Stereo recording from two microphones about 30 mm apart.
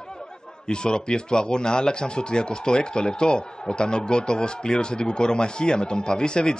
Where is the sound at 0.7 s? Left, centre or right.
Left.